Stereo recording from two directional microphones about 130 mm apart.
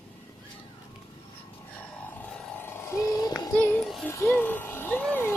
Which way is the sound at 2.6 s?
20° left (ahead or behind).